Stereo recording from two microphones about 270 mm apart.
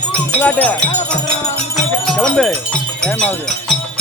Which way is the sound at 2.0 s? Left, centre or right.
Centre.